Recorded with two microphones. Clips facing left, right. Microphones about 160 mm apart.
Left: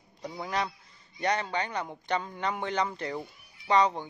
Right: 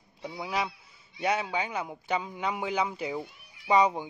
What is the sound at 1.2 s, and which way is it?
A man's voice, 5° right (ahead or behind).